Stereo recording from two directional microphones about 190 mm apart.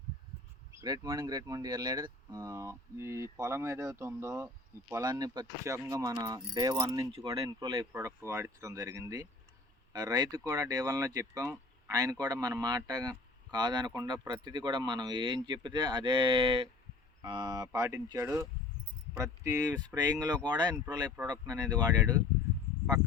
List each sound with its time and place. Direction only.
0.7 s speech: 20° right (ahead or behind)